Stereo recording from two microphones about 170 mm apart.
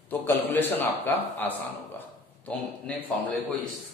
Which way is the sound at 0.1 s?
10° left (ahead or behind).